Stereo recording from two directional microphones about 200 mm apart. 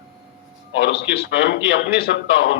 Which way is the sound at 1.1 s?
55° left (ahead or behind).